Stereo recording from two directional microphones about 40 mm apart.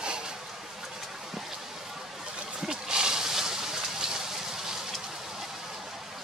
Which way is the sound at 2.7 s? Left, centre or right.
Centre.